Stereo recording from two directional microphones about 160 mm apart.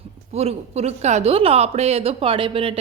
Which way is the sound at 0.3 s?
40° right (ahead or behind).